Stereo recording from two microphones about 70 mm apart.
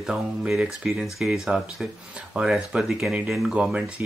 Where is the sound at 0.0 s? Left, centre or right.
Centre.